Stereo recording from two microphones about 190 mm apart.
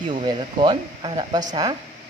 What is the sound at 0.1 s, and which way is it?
Speech, 25° right (ahead or behind).